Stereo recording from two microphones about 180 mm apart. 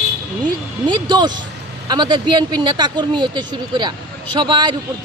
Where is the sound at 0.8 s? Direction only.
25° right (ahead or behind).